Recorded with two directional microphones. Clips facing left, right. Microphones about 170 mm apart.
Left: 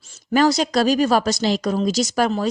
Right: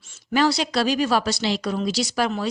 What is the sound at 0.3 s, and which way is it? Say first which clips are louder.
A woman's voice: left 4 dB; 45° left (ahead or behind).